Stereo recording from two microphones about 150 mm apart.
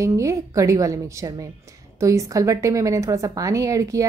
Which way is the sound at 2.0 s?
20° right (ahead or behind).